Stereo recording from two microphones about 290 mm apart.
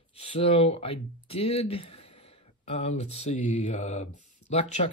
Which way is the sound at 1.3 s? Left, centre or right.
Centre.